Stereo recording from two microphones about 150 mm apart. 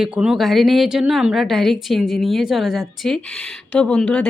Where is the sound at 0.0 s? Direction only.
5° right (ahead or behind).